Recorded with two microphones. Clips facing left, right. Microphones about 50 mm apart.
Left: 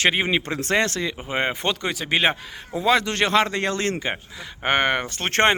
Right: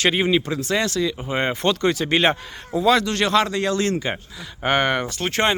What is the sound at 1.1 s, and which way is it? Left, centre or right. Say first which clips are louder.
Speech: right 1 dB; centre.